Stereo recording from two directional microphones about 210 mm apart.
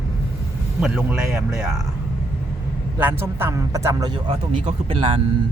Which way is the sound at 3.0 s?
10° right (ahead or behind).